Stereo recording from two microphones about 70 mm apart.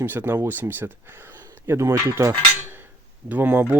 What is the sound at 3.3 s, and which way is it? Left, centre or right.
Speech, right.